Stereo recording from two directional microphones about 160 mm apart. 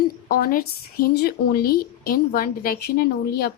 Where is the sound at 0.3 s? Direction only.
65° left (ahead or behind).